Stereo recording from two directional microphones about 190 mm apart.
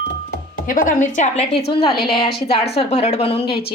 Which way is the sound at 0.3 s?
45° left (ahead or behind).